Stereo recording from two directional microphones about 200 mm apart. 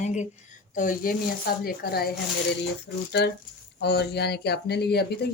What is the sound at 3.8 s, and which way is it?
Speech, 55° left (ahead or behind).